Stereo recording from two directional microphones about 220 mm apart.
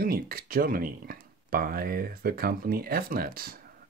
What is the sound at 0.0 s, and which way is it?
Speech, 40° right (ahead or behind).